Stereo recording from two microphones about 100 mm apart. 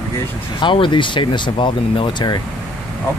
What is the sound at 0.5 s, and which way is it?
Speech, 55° left (ahead or behind).